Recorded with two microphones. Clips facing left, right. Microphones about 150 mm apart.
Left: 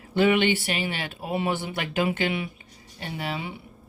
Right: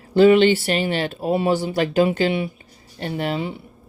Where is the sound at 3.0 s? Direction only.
45° right (ahead or behind).